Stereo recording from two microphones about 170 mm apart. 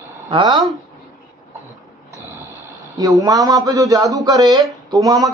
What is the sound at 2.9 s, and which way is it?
A man's voice, 20° right (ahead or behind).